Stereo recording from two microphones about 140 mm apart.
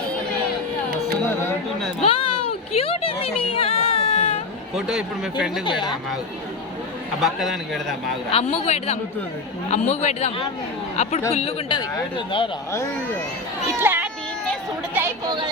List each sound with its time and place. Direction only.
2.0 s a sound: 40° left (ahead or behind)
4.7 s speech: 5° right (ahead or behind)
5.6 s speech: 35° left (ahead or behind)
7.2 s speech: centre (ahead or behind)
8.3 s speech: 45° left (ahead or behind)
11.7 s speech: 35° left (ahead or behind)
13.7 s speech: 15° right (ahead or behind)